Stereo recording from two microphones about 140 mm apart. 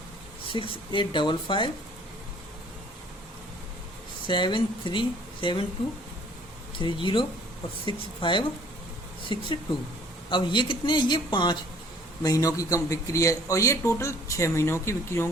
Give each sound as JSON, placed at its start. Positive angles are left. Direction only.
{"t": 0.4, "sound": "speech", "side_deg": 40}
{"t": 4.3, "sound": "speech", "side_deg": 35}
{"t": 6.7, "sound": "speech", "side_deg": 35}